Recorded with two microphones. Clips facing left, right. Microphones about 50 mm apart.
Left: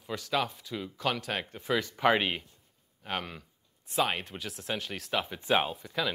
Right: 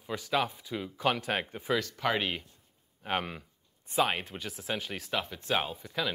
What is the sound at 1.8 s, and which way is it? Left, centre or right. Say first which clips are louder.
Speech: left 6 dB; centre.